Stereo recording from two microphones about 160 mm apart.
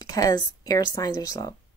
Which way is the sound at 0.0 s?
25° left (ahead or behind).